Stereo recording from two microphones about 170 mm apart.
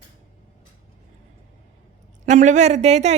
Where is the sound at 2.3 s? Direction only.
45° right (ahead or behind).